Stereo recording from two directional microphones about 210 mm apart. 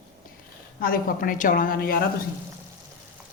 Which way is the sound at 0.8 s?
45° left (ahead or behind).